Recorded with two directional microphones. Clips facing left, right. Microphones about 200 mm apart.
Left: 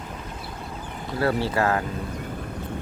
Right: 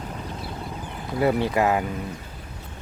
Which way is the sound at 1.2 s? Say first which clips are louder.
Right 2 dB; 20° right (ahead or behind).